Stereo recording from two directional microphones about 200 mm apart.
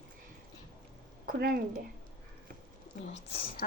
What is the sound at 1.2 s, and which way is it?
Speech, 50° right (ahead or behind).